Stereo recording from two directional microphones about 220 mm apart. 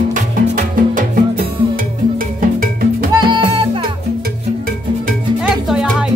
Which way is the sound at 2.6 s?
40° right (ahead or behind).